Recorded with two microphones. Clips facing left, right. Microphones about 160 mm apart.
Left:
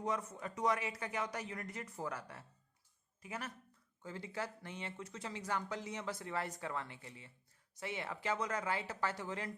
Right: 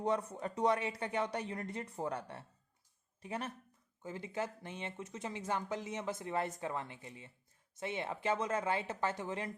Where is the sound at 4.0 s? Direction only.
20° right (ahead or behind).